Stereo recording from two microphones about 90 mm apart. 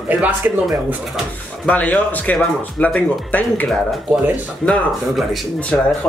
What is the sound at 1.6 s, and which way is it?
A man's voice, 15° left (ahead or behind).